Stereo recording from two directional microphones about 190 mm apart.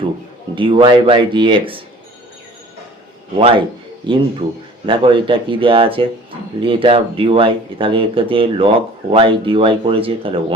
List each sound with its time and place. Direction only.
0.5 s speech: 25° right (ahead or behind)
3.3 s speech: 30° right (ahead or behind)